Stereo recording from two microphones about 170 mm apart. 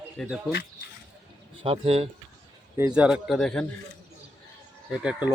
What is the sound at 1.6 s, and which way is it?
Speech, 35° right (ahead or behind).